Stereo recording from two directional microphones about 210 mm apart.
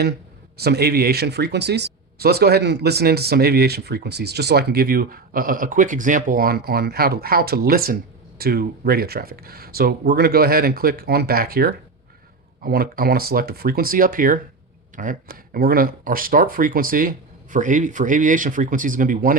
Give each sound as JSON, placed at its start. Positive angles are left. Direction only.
{"t": 0.5, "sound": "speech", "side_deg": -50}